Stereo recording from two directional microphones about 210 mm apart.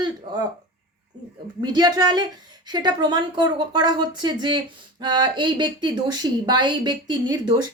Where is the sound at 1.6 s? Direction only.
20° right (ahead or behind).